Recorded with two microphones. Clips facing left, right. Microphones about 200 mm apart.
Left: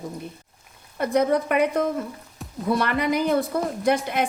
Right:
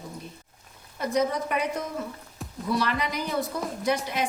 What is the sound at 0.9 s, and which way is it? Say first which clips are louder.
A woman's voice: left 5 dB; 60° left (ahead or behind).